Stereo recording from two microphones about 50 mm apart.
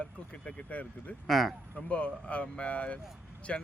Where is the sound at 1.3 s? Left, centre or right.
Centre.